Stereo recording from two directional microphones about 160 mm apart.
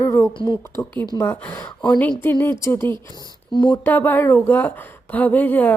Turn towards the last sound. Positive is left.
turn(degrees=10)  # may be behind; listen again after turning